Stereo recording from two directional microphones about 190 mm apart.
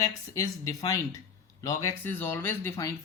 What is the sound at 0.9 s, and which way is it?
Speech, 15° left (ahead or behind).